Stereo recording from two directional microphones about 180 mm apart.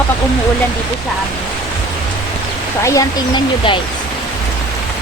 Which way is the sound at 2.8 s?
15° left (ahead or behind).